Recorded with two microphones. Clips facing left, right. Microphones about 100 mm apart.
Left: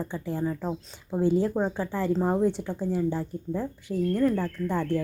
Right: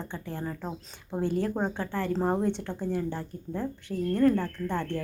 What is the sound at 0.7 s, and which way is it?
Speech, 10° left (ahead or behind).